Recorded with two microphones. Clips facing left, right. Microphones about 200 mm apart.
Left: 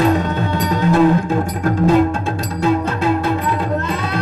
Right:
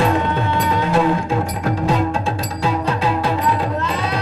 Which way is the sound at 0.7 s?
45° left (ahead or behind).